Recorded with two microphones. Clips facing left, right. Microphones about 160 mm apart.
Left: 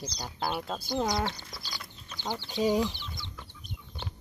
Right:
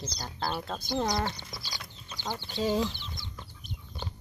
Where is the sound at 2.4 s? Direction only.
15° left (ahead or behind).